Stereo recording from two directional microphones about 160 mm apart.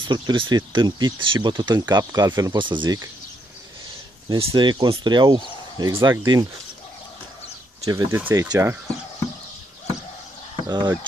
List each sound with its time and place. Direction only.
0.1 s speech: 30° right (ahead or behind)
4.3 s speech: 35° right (ahead or behind); by 6.2 s 20° right (ahead or behind)
7.8 s speech: 20° right (ahead or behind)
10.5 s a sound: 30° right (ahead or behind)